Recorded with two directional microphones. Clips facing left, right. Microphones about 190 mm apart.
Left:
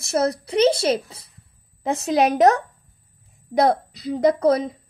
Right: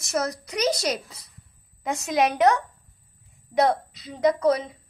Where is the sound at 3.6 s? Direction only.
35° left (ahead or behind).